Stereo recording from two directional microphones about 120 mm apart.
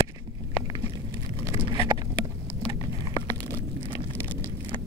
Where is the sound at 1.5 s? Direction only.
40° right (ahead or behind).